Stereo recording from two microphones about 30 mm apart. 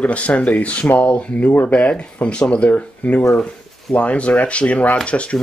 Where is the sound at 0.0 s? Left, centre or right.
Left.